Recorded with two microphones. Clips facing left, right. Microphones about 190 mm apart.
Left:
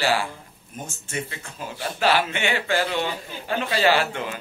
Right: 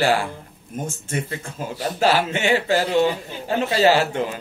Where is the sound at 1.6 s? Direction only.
40° right (ahead or behind).